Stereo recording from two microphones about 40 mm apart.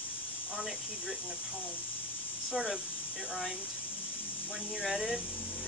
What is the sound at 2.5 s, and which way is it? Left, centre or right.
Speech, centre.